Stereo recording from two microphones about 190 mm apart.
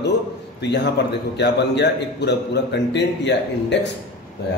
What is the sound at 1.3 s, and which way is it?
A man's voice, 65° left (ahead or behind).